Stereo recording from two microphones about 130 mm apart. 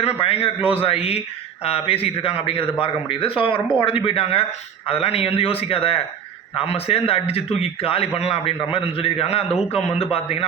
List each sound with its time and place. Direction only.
0.0 s a man's voice: 50° left (ahead or behind)